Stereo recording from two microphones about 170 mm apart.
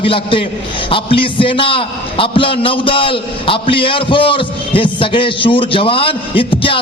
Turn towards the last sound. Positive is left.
turn(degrees=30)  # may be behind; listen again after turning